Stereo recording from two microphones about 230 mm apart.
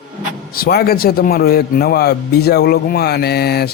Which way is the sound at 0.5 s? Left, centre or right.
Left.